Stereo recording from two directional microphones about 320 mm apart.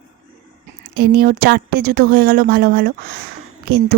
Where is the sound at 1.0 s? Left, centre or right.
Right.